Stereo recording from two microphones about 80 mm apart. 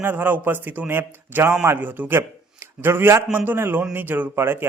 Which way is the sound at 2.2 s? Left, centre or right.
Right.